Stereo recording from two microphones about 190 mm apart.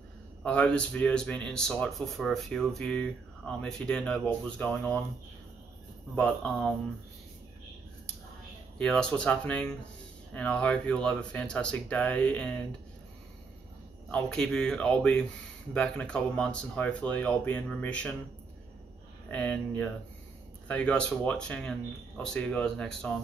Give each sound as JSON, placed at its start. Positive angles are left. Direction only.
{"t": 0.4, "sound": "speech", "side_deg": 5}
{"t": 6.1, "sound": "speech", "side_deg": 5}
{"t": 8.7, "sound": "speech", "side_deg": 5}
{"t": 14.1, "sound": "speech", "side_deg": 5}
{"t": 19.3, "sound": "speech", "side_deg": 5}